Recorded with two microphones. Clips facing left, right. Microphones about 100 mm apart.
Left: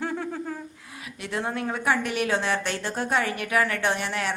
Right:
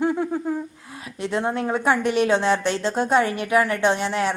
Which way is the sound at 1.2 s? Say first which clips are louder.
Right 5 dB; 25° right (ahead or behind).